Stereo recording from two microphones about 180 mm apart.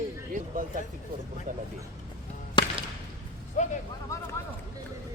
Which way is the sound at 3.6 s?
45° left (ahead or behind).